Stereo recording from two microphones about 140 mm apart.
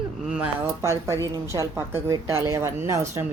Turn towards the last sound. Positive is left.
turn(degrees=-20)  # may be behind; listen again after turning